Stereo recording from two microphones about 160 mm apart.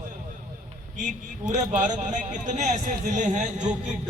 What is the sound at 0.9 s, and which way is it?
A man's voice, 50° right (ahead or behind).